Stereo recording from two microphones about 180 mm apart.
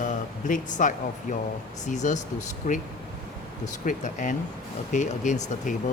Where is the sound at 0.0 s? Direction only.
45° left (ahead or behind).